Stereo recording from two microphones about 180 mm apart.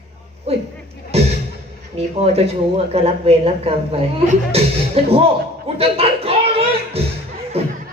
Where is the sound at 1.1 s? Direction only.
35° right (ahead or behind).